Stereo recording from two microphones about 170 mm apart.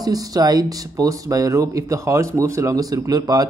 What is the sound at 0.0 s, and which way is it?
Speech, 20° right (ahead or behind).